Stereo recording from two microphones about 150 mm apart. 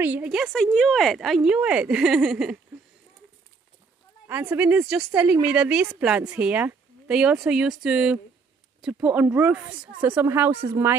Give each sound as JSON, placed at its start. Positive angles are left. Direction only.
{"t": 0.0, "sound": "speech", "side_deg": -10}
{"t": 4.3, "sound": "speech", "side_deg": -10}